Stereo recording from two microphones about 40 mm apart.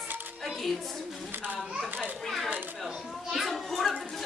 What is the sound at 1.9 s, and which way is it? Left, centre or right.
Children playing, right.